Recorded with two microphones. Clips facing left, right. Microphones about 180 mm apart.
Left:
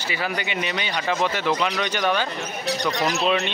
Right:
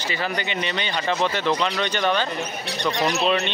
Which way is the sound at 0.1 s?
10° left (ahead or behind).